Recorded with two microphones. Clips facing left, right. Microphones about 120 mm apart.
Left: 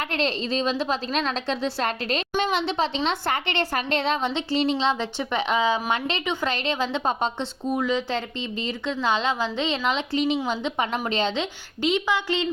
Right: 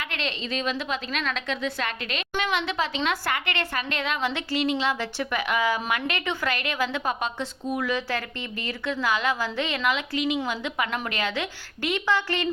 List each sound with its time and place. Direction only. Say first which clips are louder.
0.1 s a woman's voice: left 6 dB; 35° left (ahead or behind); by 12.5 s 15° left (ahead or behind)